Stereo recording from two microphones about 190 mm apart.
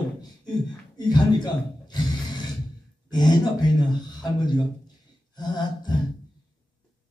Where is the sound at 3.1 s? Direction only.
20° left (ahead or behind).